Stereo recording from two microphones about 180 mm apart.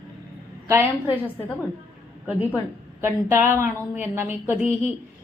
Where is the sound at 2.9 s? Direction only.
15° right (ahead or behind).